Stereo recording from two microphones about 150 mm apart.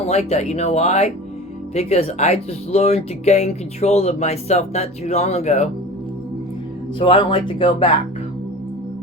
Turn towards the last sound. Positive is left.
turn(degrees=35)  # may be behind; listen again after turning